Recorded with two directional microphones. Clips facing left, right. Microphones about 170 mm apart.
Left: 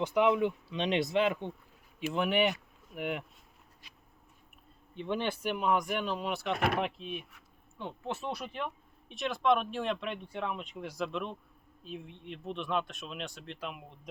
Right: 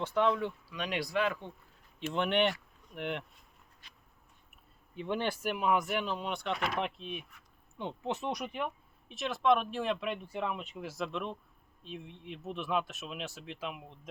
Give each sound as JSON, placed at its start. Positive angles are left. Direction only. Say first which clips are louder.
{"t": 0.0, "sound": "speech", "louder": "left 3 dB", "side_deg": 15}
{"t": 2.0, "sound": "speech", "louder": "left 1 dB", "side_deg": 5}
{"t": 4.9, "sound": "speech", "louder": "even", "side_deg": -5}
{"t": 6.5, "sound": "speech", "louder": "left 5 dB", "side_deg": 55}
{"t": 6.7, "sound": "speech", "louder": "left 2 dB", "side_deg": 0}
{"t": 7.8, "sound": "speech", "louder": "right 2 dB", "side_deg": -20}
{"t": 9.0, "sound": "speech", "louder": "even", "side_deg": 0}